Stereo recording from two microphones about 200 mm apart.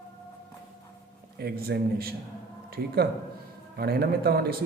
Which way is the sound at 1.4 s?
50° right (ahead or behind).